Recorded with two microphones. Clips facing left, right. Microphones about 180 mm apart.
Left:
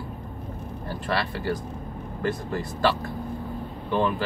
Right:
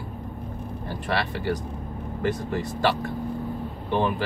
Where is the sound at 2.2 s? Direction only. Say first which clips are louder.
Right 1 dB; 15° right (ahead or behind).